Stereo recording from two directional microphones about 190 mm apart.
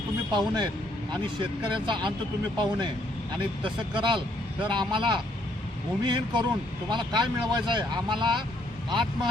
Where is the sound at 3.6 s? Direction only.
25° right (ahead or behind).